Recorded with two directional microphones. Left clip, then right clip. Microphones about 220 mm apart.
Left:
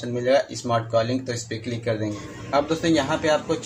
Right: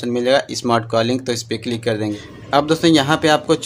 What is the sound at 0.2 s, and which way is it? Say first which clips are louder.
A man's voice: right 3 dB; 45° right (ahead or behind).